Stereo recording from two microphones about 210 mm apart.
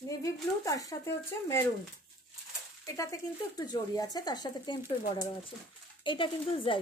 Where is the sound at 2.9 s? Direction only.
15° left (ahead or behind).